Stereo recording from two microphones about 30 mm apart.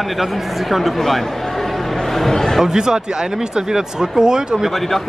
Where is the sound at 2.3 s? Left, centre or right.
Centre.